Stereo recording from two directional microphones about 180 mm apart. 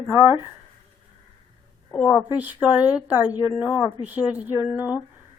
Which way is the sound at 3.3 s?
30° left (ahead or behind).